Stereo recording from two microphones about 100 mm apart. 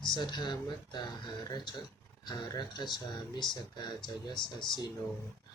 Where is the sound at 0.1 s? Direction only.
50° left (ahead or behind).